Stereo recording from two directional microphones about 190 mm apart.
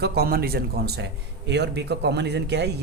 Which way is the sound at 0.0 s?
55° right (ahead or behind).